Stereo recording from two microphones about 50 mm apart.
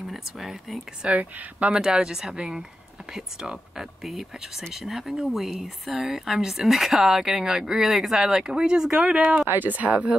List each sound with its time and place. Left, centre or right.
0.1 s speech: centre
1.1 s speech: right
1.8 s speech: centre
9.5 s speech: right